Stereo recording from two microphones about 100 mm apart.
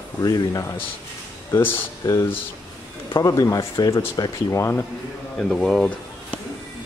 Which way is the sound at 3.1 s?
35° left (ahead or behind).